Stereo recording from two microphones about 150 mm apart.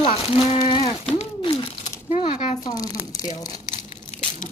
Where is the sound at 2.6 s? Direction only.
25° left (ahead or behind).